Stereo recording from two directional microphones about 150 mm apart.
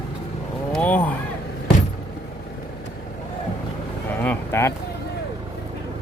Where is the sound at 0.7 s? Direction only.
10° left (ahead or behind).